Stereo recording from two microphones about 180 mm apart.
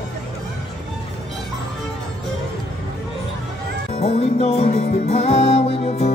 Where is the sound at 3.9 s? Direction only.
35° left (ahead or behind).